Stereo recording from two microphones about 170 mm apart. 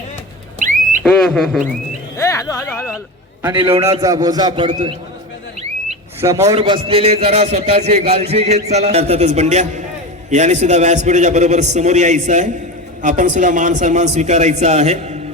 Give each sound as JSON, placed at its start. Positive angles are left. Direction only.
{"t": 0.6, "sound": "a sound", "side_deg": -50}
{"t": 1.2, "sound": "speech", "side_deg": 0}
{"t": 2.1, "sound": "speech", "side_deg": 15}
{"t": 3.7, "sound": "a man's voice", "side_deg": -15}
{"t": 6.1, "sound": "speech", "side_deg": -15}
{"t": 6.6, "sound": "a man's voice", "side_deg": -30}